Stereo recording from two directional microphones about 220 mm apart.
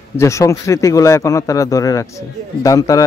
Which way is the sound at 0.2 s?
15° left (ahead or behind).